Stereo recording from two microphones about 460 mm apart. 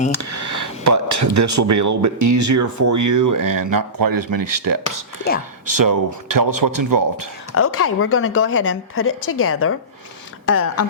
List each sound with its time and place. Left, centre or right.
0.1 s speech: right
7.5 s speech: left